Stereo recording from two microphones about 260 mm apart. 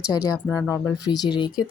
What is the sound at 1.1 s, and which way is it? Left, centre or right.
Speech, centre.